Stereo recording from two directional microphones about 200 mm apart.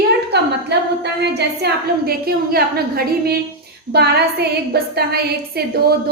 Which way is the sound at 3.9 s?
55° right (ahead or behind).